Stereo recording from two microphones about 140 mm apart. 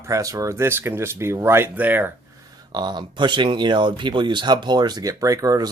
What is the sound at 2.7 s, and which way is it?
Speech, 30° right (ahead or behind).